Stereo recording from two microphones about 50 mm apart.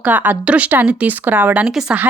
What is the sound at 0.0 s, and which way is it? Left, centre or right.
Speech, right.